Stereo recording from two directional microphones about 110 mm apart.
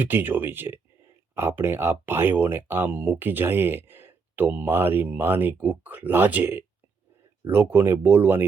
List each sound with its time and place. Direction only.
0.0 s speech: 15° right (ahead or behind)